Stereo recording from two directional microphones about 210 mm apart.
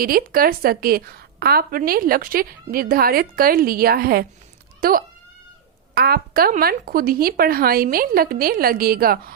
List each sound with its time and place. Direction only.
0.0 s a woman's voice: 45° right (ahead or behind)